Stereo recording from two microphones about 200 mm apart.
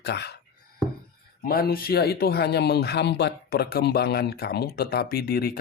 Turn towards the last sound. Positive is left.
turn(degrees=50)  # may be behind; listen again after turning